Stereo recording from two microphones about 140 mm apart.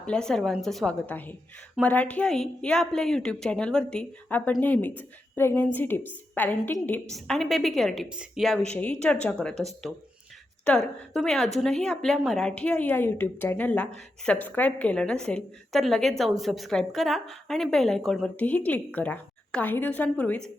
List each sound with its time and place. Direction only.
0.0 s a woman's voice: 5° left (ahead or behind)